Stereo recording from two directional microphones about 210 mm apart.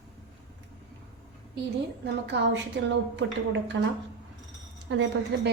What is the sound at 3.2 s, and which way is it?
Speech, 70° right (ahead or behind).